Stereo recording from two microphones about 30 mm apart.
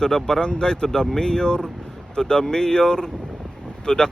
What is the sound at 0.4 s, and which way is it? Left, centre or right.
Speech, left.